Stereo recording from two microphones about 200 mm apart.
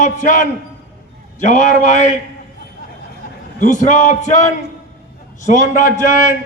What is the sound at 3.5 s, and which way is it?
A man's voice, 40° left (ahead or behind).